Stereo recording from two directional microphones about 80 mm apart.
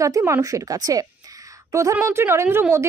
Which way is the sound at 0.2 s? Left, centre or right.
Right.